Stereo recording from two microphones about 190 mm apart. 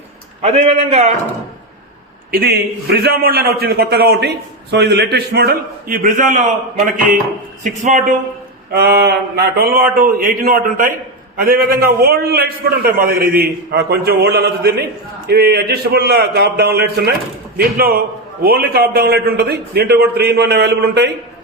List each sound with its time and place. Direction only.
0.4 s a man's voice: 35° right (ahead or behind)
2.3 s a man's voice: 55° right (ahead or behind)
8.7 s a man's voice: 55° right (ahead or behind)